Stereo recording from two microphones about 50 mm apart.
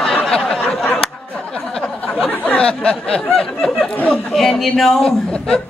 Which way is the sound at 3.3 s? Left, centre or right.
Centre.